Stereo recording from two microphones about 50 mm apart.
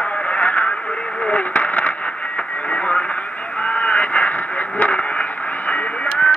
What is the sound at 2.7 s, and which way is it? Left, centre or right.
Radio, left.